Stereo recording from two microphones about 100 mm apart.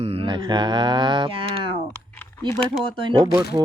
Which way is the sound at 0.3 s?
50° right (ahead or behind).